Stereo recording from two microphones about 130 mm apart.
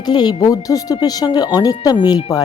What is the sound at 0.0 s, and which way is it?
A woman's voice, 30° left (ahead or behind).